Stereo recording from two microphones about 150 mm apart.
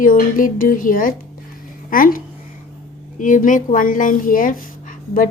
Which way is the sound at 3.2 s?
60° left (ahead or behind).